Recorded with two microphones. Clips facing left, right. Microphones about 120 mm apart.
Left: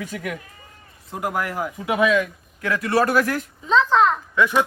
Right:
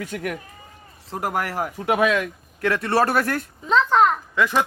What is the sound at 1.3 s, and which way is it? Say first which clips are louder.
Speech: even; 35° right (ahead or behind).